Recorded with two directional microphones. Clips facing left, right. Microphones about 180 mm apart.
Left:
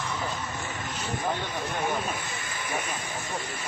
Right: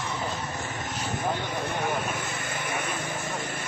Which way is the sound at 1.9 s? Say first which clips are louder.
Right 1 dB; 60° right (ahead or behind).